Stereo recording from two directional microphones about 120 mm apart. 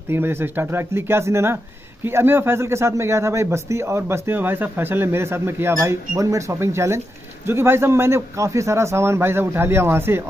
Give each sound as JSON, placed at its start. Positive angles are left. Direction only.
{"t": 0.1, "sound": "a man's voice", "side_deg": -20}